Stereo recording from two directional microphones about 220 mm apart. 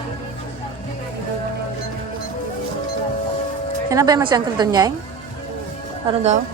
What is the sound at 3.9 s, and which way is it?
A woman's voice, 15° right (ahead or behind).